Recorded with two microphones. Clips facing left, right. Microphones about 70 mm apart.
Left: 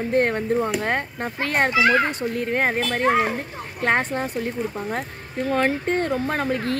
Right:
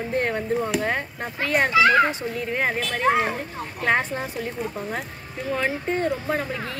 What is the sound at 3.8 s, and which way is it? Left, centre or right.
Speech, left.